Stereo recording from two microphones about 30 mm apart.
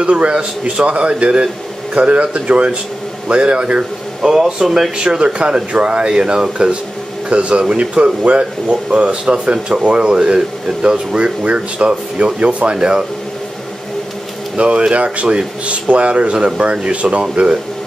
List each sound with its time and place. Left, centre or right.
0.0 s speech: right
4.2 s speech: right
4.9 s speech: right
9.1 s speech: right
11.1 s speech: right
12.7 s speech: right
14.6 s speech: right